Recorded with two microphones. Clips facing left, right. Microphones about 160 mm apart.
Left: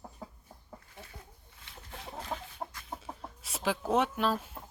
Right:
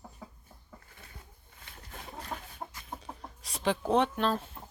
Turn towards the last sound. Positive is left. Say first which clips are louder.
# right 1 dB
turn(degrees=5)  # may be behind; listen again after turning